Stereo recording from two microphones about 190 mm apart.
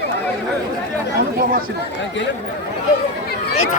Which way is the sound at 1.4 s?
50° right (ahead or behind).